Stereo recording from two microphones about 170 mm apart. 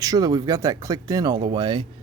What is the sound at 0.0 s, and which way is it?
Speech, 20° right (ahead or behind).